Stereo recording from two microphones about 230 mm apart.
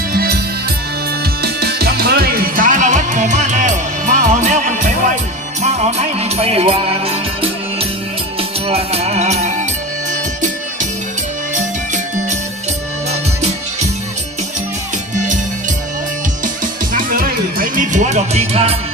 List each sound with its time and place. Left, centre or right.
0.1 s music: right
1.4 s music: right
8.4 s music: right
11.5 s music: right
16.9 s music: right